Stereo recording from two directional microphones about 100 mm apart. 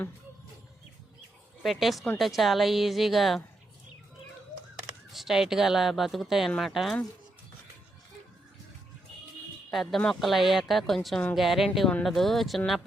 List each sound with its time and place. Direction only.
1.6 s speech: centre (ahead or behind)
5.1 s speech: 5° right (ahead or behind)
9.7 s speech: 5° left (ahead or behind)